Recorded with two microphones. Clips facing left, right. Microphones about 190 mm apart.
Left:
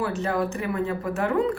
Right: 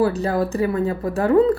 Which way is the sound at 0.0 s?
35° right (ahead or behind).